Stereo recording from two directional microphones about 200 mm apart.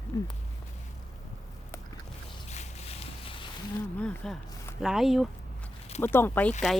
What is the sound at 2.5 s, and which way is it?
Boat, 35° left (ahead or behind).